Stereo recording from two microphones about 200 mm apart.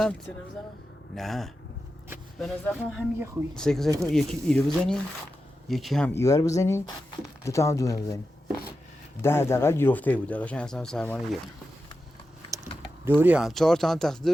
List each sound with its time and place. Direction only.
0.0 s speech: 5° left (ahead or behind)
2.7 s speech: 5° right (ahead or behind)
3.5 s speech: 5° left (ahead or behind)
6.1 s speech: 15° left (ahead or behind)
9.2 s speech: 10° left (ahead or behind)
13.1 s speech: 10° right (ahead or behind)